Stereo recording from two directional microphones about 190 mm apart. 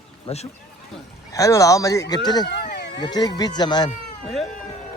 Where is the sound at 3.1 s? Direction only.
20° left (ahead or behind).